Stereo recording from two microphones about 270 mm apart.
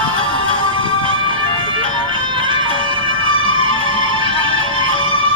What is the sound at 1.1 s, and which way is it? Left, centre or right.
Music, centre.